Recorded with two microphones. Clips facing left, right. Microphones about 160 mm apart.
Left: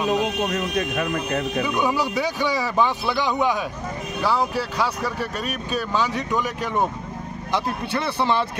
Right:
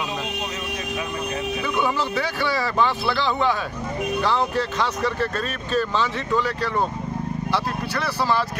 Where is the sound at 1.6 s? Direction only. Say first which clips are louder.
Right 2 dB; 15° left (ahead or behind).